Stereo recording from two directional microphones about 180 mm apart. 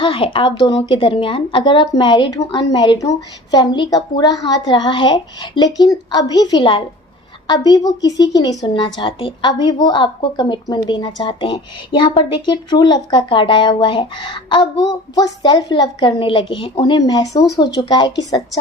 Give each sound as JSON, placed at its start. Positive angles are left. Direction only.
{"t": 0.0, "sound": "a woman's voice", "side_deg": 30}